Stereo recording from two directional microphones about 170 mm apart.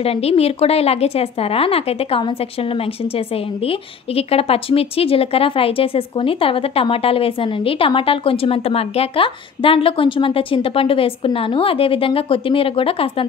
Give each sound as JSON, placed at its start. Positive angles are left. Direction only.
{"t": 0.0, "sound": "speech", "side_deg": 35}
{"t": 3.6, "sound": "speech", "side_deg": 35}